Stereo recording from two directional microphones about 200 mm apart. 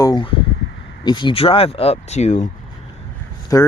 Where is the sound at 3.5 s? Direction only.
15° left (ahead or behind).